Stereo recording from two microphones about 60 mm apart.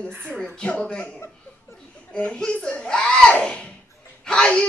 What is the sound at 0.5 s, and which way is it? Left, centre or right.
A child's voice, centre.